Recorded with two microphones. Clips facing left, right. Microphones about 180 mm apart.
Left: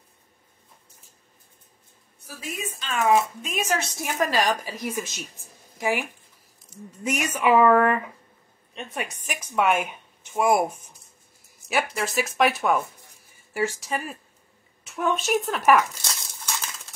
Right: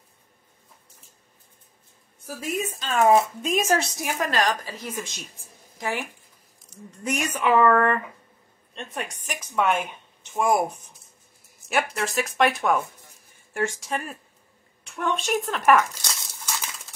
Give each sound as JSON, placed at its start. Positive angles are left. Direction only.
{"t": 2.8, "sound": "speech", "side_deg": -35}
{"t": 4.3, "sound": "speech", "side_deg": 15}
{"t": 11.7, "sound": "speech", "side_deg": 0}